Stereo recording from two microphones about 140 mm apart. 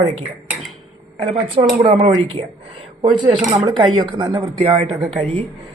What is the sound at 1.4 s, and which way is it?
A woman's voice, 45° right (ahead or behind).